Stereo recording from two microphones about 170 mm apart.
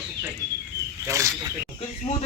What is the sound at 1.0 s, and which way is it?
Speech, 20° right (ahead or behind).